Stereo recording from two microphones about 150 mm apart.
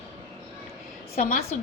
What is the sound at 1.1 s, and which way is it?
Speech, 70° left (ahead or behind).